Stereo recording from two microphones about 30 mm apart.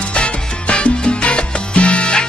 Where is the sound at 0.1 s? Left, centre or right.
Left.